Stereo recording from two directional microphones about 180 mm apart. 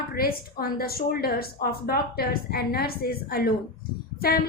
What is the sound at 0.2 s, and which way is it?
A woman's voice, 55° left (ahead or behind).